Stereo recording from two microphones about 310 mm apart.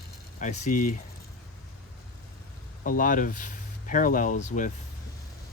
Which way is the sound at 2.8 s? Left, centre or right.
Left.